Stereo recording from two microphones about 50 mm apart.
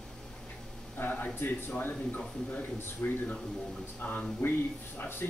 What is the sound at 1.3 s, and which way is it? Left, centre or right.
Speech, left.